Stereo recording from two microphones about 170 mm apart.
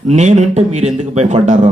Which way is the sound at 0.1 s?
40° right (ahead or behind).